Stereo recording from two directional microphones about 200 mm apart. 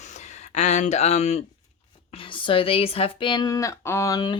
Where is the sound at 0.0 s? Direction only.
35° left (ahead or behind).